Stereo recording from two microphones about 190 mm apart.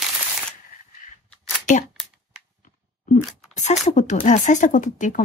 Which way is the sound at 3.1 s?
40° left (ahead or behind).